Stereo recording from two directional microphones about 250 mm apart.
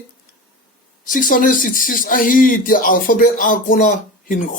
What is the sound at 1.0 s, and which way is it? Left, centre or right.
Speech, left.